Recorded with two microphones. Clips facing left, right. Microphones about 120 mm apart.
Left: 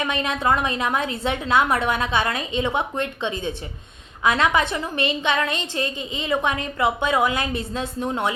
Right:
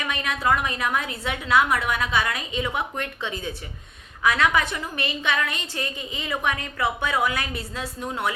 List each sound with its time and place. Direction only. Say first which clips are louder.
0.0 s a woman's voice: left 3 dB; 25° left (ahead or behind)